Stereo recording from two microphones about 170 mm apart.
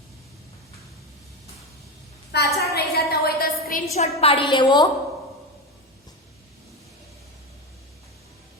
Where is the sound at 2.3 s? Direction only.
70° left (ahead or behind).